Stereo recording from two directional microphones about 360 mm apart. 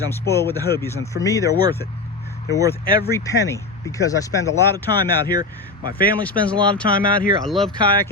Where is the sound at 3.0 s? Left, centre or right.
Centre.